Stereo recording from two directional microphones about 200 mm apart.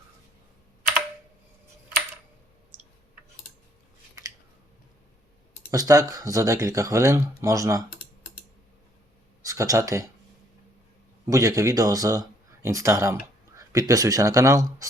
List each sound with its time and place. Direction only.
4.2 s scissors: 15° right (ahead or behind)
5.7 s speech: 20° right (ahead or behind)
9.4 s speech: 15° right (ahead or behind)
11.3 s speech: 15° right (ahead or behind)